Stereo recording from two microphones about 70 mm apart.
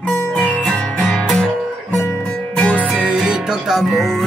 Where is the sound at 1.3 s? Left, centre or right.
Centre.